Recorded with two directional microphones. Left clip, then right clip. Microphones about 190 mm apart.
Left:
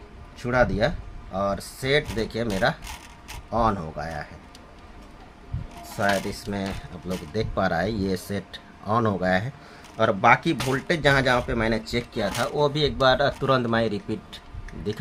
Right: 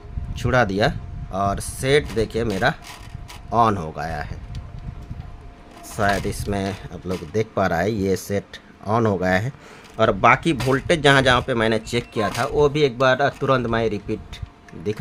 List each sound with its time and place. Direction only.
0.3 s speech: 65° right (ahead or behind)
6.0 s speech: 50° right (ahead or behind)
7.3 s speech: 40° right (ahead or behind); by 14.2 s 25° right (ahead or behind)